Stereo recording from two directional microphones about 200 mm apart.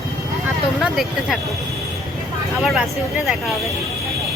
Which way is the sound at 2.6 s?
Centre (ahead or behind).